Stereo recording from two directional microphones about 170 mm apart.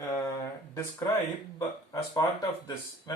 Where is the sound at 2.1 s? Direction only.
20° left (ahead or behind).